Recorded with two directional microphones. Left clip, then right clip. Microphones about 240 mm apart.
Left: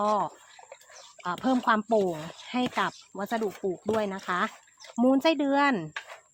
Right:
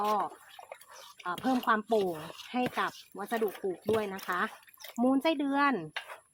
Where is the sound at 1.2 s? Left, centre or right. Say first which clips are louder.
Left 4 dB; left.